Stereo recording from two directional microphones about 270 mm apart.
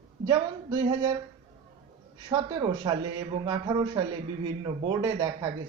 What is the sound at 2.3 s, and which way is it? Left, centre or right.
A man's voice, centre.